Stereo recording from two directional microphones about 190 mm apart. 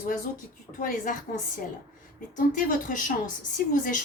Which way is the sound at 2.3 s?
45° left (ahead or behind).